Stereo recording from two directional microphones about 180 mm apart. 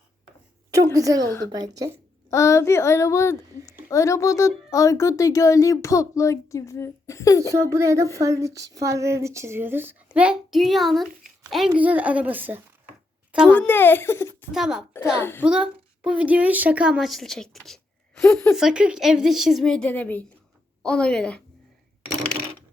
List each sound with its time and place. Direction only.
0.9 s speech: 20° right (ahead or behind)
2.3 s a woman's voice: 15° left (ahead or behind)
7.5 s a woman's voice: 15° right (ahead or behind)
13.6 s a woman's voice: 10° left (ahead or behind)
14.5 s a woman's voice: 5° right (ahead or behind)
15.2 s a woman's voice: 10° left (ahead or behind)
15.4 s a woman's voice: 5° right (ahead or behind)